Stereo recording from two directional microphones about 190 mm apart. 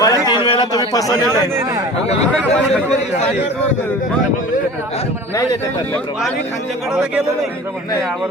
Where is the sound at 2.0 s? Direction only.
35° left (ahead or behind).